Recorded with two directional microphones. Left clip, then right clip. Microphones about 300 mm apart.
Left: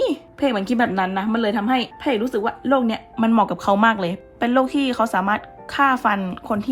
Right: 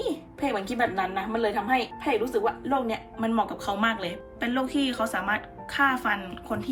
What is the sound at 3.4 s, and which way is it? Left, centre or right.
A woman's voice, centre.